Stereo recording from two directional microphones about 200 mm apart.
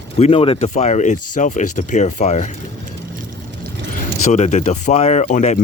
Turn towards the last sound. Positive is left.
turn(degrees=35)  # may be behind; listen again after turning